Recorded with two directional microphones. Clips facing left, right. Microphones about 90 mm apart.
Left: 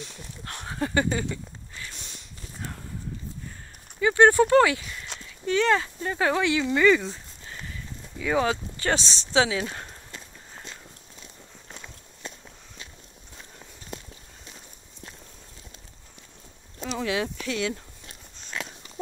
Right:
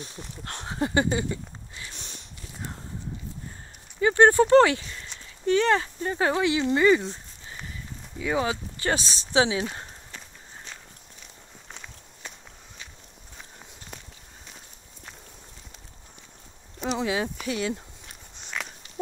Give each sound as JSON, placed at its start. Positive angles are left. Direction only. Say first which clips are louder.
{"t": 0.0, "sound": "a sound", "louder": "right 1 dB", "side_deg": -30}
{"t": 2.0, "sound": "walk", "louder": "right 1 dB", "side_deg": -35}
{"t": 4.0, "sound": "clip-clop", "louder": "even", "side_deg": -35}
{"t": 4.3, "sound": "speech", "louder": "right 1 dB", "side_deg": -25}
{"t": 7.7, "sound": "a sound", "louder": "even", "side_deg": -25}
{"t": 9.3, "sound": "speech", "louder": "even", "side_deg": -25}
{"t": 16.8, "sound": "speech", "louder": "right 3 dB", "side_deg": -20}
{"t": 17.1, "sound": "speech", "louder": "even", "side_deg": -5}